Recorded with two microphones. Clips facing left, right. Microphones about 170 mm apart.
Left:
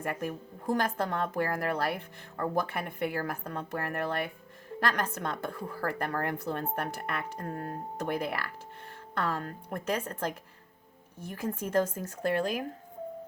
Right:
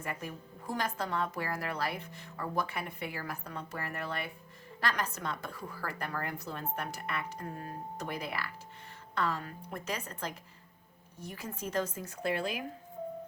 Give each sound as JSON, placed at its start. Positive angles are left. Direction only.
{"t": 0.0, "sound": "a woman's voice", "side_deg": 50}